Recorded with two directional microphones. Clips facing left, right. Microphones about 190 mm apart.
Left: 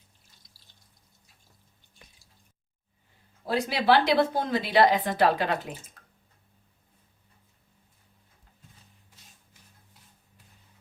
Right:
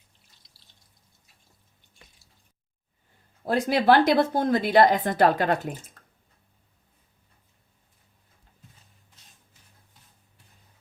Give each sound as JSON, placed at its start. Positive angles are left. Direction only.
{"t": 3.4, "sound": "a woman's voice", "side_deg": -50}